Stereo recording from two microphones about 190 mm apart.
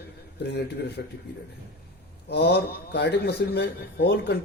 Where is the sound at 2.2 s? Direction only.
60° left (ahead or behind).